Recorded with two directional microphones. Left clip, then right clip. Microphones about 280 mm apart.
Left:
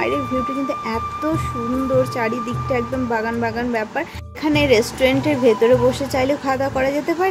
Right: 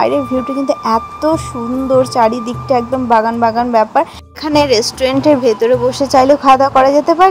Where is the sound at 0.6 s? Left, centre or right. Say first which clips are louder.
Right 10 dB; centre.